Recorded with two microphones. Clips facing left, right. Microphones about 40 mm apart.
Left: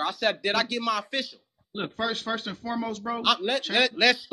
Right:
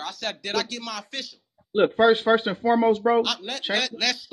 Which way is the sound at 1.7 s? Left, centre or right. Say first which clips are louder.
Right 12 dB; right.